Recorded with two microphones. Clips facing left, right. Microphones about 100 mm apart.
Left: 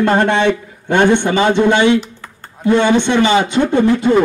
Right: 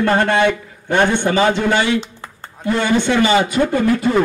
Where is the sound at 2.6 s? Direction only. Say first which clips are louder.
Left 4 dB; 20° left (ahead or behind).